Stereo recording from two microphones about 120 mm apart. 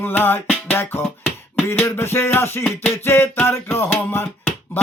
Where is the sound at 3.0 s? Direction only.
20° left (ahead or behind).